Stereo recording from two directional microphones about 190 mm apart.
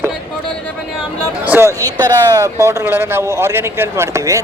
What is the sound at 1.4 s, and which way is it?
Speech, 10° right (ahead or behind).